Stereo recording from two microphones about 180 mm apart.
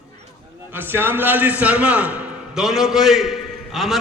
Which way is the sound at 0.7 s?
10° right (ahead or behind).